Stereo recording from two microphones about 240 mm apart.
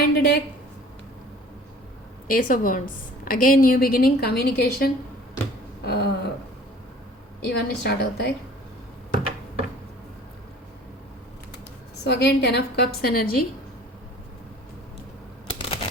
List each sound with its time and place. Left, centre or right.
0.0 s a sound: left
2.2 s a woman's voice: left
5.8 s a sound: left
7.4 s a woman's voice: left
12.0 s a woman's voice: left
15.4 s shuffling cards: left